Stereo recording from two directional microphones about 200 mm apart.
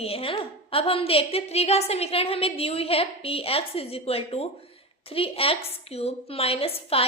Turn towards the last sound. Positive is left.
turn(degrees=30)  # may be behind; listen again after turning